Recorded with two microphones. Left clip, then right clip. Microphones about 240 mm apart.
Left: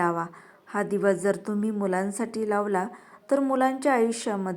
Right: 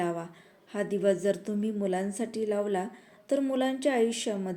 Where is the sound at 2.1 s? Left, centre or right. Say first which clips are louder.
Left 3 dB; centre.